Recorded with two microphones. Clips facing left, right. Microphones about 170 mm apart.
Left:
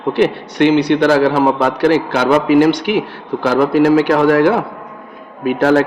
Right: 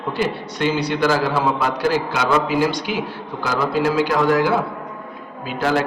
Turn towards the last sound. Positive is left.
turn(degrees=65)  # may be behind; listen again after turning